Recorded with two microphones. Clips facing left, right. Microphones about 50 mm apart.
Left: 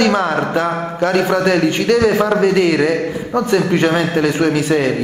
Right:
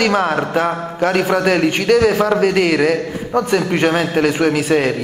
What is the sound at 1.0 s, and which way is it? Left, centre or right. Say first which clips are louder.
A man's voice: even; centre.